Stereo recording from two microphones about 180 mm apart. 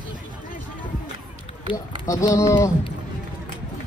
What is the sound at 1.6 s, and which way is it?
Speech, 15° left (ahead or behind).